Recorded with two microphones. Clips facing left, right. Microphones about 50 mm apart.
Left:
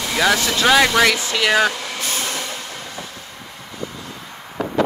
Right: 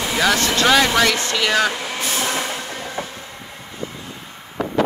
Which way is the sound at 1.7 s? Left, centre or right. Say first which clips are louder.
Right 2 dB; right.